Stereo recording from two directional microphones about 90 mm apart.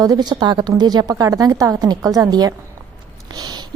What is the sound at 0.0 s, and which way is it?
Speech, 50° right (ahead or behind).